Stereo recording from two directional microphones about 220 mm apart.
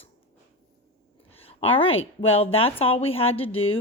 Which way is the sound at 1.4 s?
25° left (ahead or behind).